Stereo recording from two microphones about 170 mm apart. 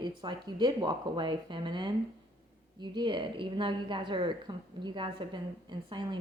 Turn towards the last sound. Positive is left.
turn(degrees=-25)  # may be behind; listen again after turning